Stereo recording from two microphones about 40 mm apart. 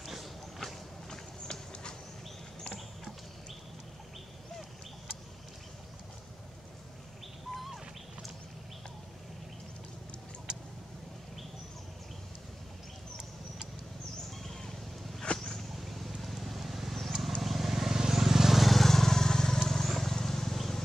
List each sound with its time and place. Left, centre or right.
0.0 s walk: centre
1.1 s clip-clop: centre
7.5 s bird: centre
14.4 s a sound: centre
15.8 s vehicle: centre
19.6 s wild animals: centre